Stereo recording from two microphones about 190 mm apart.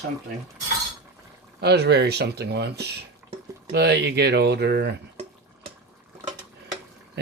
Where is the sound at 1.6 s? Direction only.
60° right (ahead or behind).